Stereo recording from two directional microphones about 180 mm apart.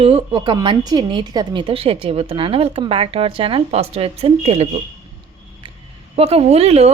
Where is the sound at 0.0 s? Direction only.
30° right (ahead or behind).